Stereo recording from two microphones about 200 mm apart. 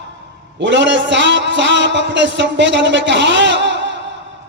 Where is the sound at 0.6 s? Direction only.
65° right (ahead or behind).